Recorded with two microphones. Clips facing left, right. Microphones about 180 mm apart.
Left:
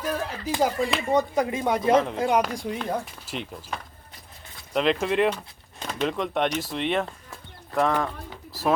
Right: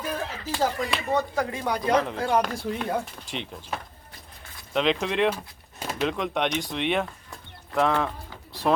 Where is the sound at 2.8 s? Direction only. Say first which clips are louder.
Right 1 dB; centre (ahead or behind).